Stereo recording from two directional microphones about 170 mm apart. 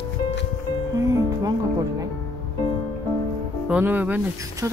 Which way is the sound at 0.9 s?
20° right (ahead or behind).